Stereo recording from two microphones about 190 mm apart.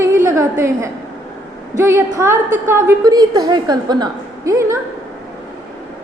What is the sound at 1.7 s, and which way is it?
A woman's voice, 15° right (ahead or behind).